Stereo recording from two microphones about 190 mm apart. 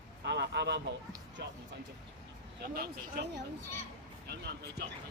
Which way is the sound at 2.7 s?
55° right (ahead or behind).